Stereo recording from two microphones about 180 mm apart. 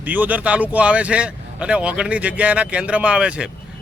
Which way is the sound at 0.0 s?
10° right (ahead or behind).